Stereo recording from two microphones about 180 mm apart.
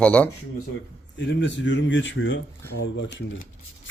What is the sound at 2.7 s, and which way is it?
Speech, 80° left.